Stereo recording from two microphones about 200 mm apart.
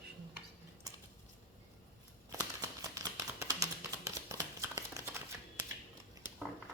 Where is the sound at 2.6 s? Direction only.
15° right (ahead or behind).